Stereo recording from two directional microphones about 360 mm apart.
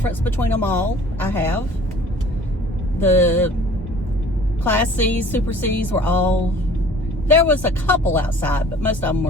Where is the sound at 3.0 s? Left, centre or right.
Centre.